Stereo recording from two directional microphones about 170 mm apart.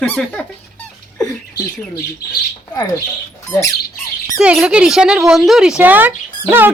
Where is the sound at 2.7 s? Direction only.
20° left (ahead or behind).